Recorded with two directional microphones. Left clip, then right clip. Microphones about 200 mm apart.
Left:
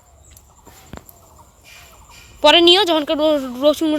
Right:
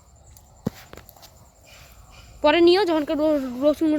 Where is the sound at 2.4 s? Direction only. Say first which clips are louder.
Left 6 dB; centre (ahead or behind).